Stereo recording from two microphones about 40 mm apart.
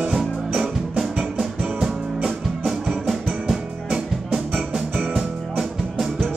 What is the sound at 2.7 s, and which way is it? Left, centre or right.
Music, centre.